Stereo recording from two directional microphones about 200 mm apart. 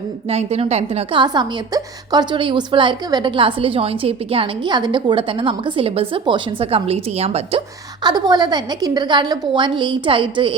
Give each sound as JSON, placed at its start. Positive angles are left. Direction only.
{"t": 0.3, "sound": "a woman's voice", "side_deg": -30}